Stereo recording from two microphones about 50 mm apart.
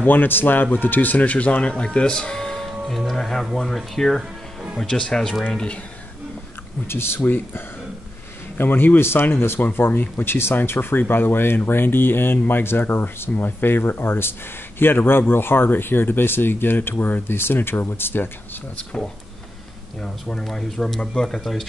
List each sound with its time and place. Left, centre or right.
0.0 s speech: left; by 5.8 s centre
6.9 s speech: left
7.2 s speech: left
20.0 s speech: centre